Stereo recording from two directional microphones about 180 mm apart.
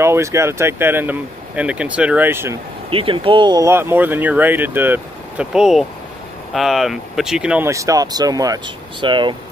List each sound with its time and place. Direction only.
0.0 s speech: 15° right (ahead or behind)
2.9 s speech: 30° right (ahead or behind)